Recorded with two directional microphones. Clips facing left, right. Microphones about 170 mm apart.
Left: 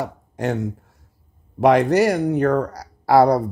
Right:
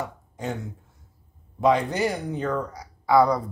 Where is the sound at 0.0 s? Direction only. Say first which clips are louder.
Left 7 dB; 75° left (ahead or behind).